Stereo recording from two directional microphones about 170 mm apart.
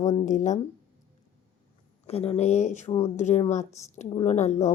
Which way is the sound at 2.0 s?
35° left (ahead or behind).